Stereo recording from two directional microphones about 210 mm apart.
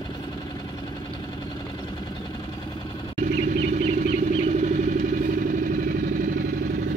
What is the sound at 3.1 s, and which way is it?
Vehicle, 35° right (ahead or behind).